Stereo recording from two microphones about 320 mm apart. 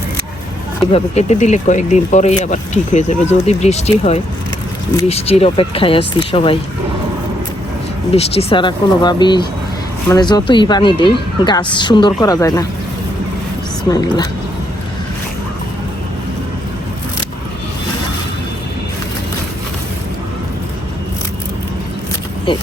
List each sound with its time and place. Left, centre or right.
0.9 s speech: left
8.1 s speech: centre
13.9 s speech: centre
22.5 s speech: centre